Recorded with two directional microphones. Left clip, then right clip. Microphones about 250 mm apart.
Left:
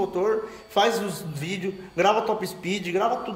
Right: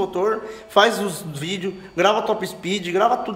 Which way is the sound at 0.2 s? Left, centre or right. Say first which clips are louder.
Right 3 dB; centre.